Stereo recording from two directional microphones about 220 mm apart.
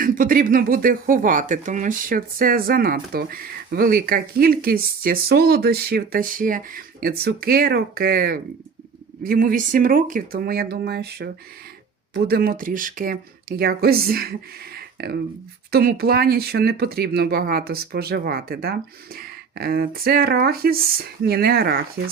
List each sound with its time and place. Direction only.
0.0 s speech: 40° right (ahead or behind)
14.8 s a sound: 45° right (ahead or behind)
15.7 s speech: 45° right (ahead or behind)